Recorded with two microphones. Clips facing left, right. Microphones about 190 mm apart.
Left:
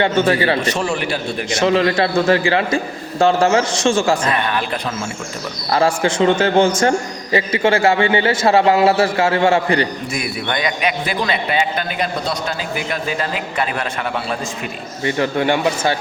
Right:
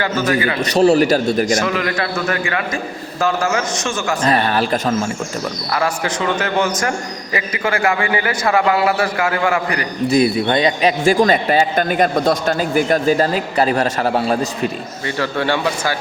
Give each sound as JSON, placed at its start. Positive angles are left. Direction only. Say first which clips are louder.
{"t": 0.0, "sound": "a man's voice", "louder": "left 2 dB", "side_deg": 30}
{"t": 0.6, "sound": "a man's voice", "louder": "right 8 dB", "side_deg": -35}
{"t": 1.5, "sound": "a man's voice", "louder": "left 4 dB", "side_deg": 30}
{"t": 4.2, "sound": "a man's voice", "louder": "right 3 dB", "side_deg": -35}
{"t": 5.7, "sound": "a man's voice", "louder": "left 5 dB", "side_deg": 30}
{"t": 10.1, "sound": "a man's voice", "louder": "right 9 dB", "side_deg": -35}
{"t": 11.0, "sound": "speech", "louder": "right 7 dB", "side_deg": -45}
{"t": 15.0, "sound": "a man's voice", "louder": "left 3 dB", "side_deg": 20}